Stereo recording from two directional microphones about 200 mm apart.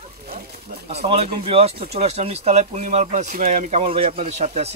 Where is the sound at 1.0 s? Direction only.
30° right (ahead or behind).